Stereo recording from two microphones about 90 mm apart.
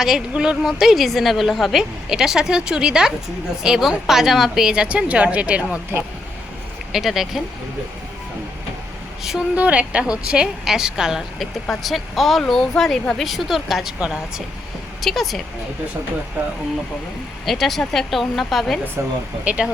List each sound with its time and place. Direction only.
0.0 s a woman's voice: 5° right (ahead or behind)
6.9 s speech: 5° right (ahead or behind)
9.6 s a woman's voice: 15° right (ahead or behind); by 15.4 s centre (ahead or behind)
17.4 s speech: centre (ahead or behind)
19.0 s speech: 30° right (ahead or behind)
19.5 s a woman's voice: 10° right (ahead or behind)